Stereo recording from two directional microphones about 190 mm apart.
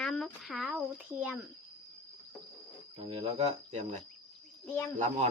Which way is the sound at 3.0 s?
30° right (ahead or behind).